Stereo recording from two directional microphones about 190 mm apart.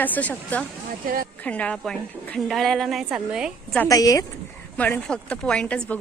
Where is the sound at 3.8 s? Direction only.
20° left (ahead or behind).